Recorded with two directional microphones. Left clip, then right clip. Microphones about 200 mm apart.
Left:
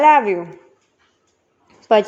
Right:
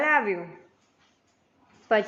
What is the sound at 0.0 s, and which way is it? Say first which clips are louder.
Speech: left 11 dB; 30° left (ahead or behind).